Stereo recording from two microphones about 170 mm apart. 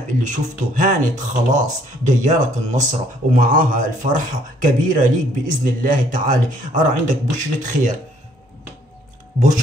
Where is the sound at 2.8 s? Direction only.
50° right (ahead or behind).